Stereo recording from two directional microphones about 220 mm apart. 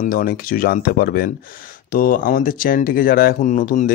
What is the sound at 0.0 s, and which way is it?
Speech, 40° left (ahead or behind).